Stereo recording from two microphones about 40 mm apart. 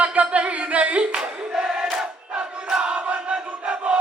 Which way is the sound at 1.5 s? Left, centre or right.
Centre.